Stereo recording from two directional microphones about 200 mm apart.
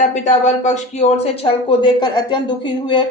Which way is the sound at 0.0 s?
40° left (ahead or behind).